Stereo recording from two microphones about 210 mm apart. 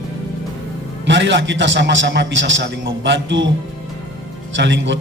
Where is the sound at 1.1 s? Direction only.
60° right (ahead or behind).